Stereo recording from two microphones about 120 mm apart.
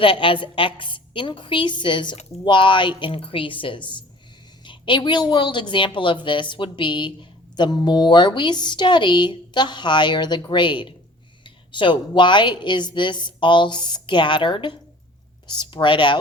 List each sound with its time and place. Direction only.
0.0 s a woman's voice: 45° left (ahead or behind)